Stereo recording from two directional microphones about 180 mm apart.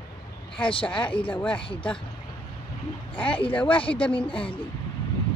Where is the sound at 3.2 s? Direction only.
30° left (ahead or behind).